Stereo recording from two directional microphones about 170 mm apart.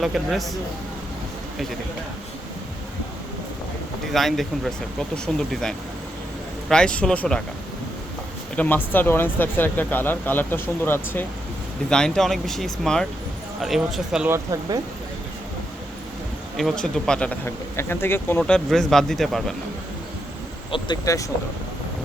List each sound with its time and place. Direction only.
0.0 s speech: centre (ahead or behind)
4.1 s speech: centre (ahead or behind)
8.5 s speech: 10° left (ahead or behind)
14.3 s speech: 20° right (ahead or behind)
16.6 s speech: 5° left (ahead or behind)
20.7 s speech: 30° left (ahead or behind)